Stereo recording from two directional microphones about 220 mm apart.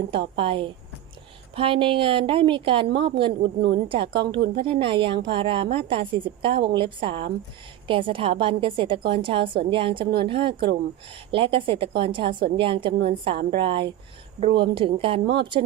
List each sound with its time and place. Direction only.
0.1 s speech: 25° right (ahead or behind)
13.3 s a woman's voice: 40° right (ahead or behind)
13.6 s speech: 25° right (ahead or behind)